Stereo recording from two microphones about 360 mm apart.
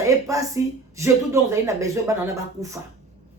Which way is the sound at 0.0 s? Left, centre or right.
Centre.